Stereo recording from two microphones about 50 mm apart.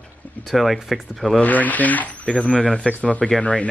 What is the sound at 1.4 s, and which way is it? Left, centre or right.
Speech, left.